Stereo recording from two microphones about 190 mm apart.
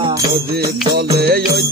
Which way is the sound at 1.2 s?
55° right (ahead or behind).